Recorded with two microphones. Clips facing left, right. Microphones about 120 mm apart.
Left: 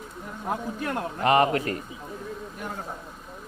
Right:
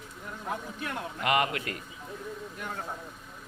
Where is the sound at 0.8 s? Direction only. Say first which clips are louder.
Left 6 dB; 35° left (ahead or behind).